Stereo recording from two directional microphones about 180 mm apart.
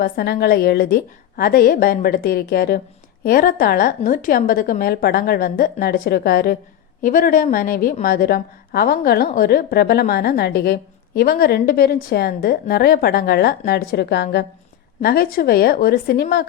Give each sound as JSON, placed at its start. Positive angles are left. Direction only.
{"t": 0.0, "sound": "a woman's voice", "side_deg": 65}